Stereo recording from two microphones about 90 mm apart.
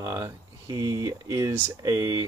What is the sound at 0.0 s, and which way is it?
Speech, 40° right (ahead or behind).